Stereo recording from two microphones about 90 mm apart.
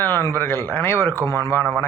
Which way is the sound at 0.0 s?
20° left (ahead or behind).